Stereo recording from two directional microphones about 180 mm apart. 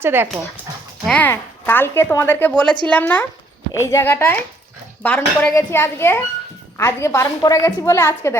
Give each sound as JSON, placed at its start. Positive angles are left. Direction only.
{"t": 0.0, "sound": "speech", "side_deg": -10}
{"t": 1.0, "sound": "a woman's voice", "side_deg": 10}